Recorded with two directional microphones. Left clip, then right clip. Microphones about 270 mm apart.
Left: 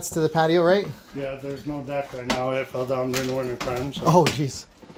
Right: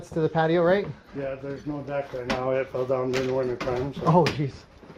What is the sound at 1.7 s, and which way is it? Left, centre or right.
Speech, left.